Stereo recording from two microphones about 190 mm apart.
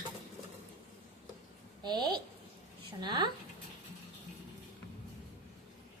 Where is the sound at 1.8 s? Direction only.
20° right (ahead or behind).